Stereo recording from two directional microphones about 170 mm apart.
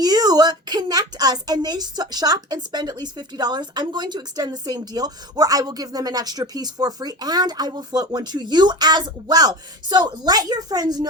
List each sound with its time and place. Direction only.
0.0 s a woman's voice: 25° right (ahead or behind)